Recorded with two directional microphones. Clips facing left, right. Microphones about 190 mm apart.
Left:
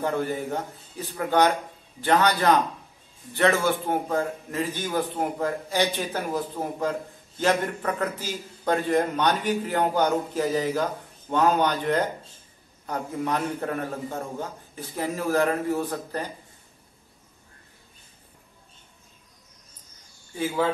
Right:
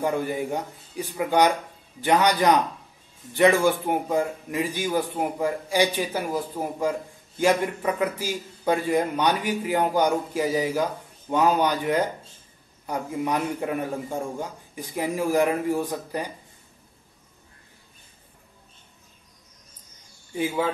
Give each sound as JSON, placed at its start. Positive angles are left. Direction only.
{"t": 0.0, "sound": "a man's voice", "side_deg": -10}